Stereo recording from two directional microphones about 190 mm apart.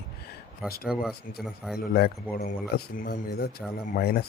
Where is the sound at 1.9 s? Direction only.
55° left (ahead or behind).